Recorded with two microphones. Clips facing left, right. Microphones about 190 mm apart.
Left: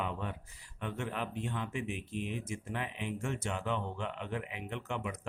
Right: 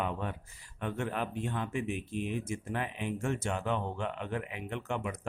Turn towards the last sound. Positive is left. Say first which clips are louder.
# right 3 dB
turn(degrees=-45)  # may be behind; listen again after turning